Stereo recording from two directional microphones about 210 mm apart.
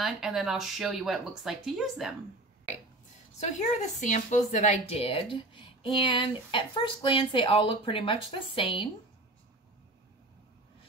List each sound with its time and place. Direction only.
0.0 s speech: centre (ahead or behind)
3.3 s speech: 35° left (ahead or behind)